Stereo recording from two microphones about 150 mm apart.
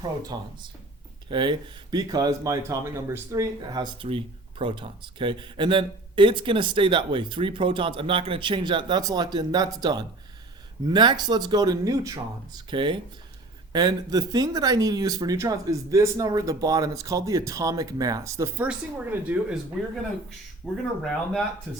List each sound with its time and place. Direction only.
0.0 s speech: 25° right (ahead or behind)
4.0 s speech: 35° right (ahead or behind); by 19.5 s 10° right (ahead or behind)
20.6 s speech: 5° right (ahead or behind)